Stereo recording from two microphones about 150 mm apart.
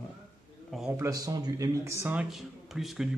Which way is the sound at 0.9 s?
20° right (ahead or behind).